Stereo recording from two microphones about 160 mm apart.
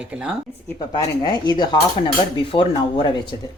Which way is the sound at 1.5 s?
25° left (ahead or behind).